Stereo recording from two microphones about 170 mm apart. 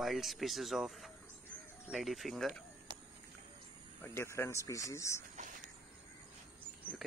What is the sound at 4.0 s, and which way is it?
Speech, 15° left (ahead or behind).